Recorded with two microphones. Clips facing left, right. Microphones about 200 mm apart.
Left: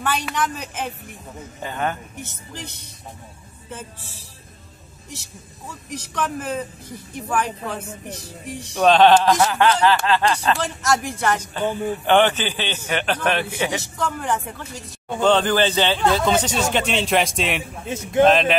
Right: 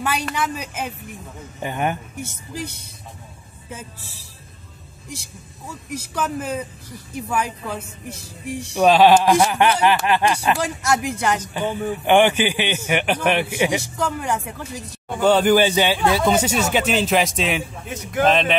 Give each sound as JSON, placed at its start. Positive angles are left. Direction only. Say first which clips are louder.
{"t": 0.2, "sound": "speech", "louder": "even", "side_deg": -5}
{"t": 5.9, "sound": "speech", "louder": "right 1 dB", "side_deg": -5}
{"t": 11.6, "sound": "a man's voice", "louder": "left 2 dB", "side_deg": 15}
{"t": 12.0, "sound": "speech", "louder": "right 2 dB", "side_deg": -15}
{"t": 17.8, "sound": "a man's voice", "louder": "left 9 dB", "side_deg": 25}
{"t": 18.2, "sound": "speech", "louder": "left 2 dB", "side_deg": 0}